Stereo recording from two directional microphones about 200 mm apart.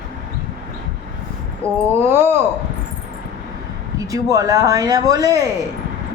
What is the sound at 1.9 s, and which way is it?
Speech, 10° right (ahead or behind).